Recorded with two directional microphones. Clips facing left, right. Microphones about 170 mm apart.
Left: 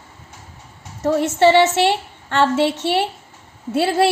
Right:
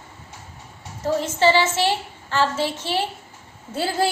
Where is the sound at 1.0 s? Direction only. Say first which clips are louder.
Left 5 dB; 65° left (ahead or behind).